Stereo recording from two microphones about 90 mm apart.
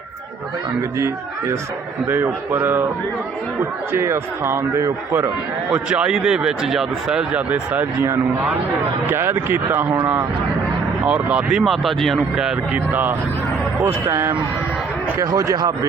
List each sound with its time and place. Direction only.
0.9 s a man's voice: 30° right (ahead or behind)
5.7 s speech: 10° right (ahead or behind)
9.0 s a man's voice: 25° right (ahead or behind)
11.0 s speech: 15° right (ahead or behind)
11.6 s speech: centre (ahead or behind)
12.9 s a man's voice: 20° right (ahead or behind)
13.8 s speech: 30° right (ahead or behind)